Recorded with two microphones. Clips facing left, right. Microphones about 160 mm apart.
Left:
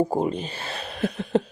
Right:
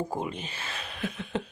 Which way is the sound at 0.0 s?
35° left (ahead or behind).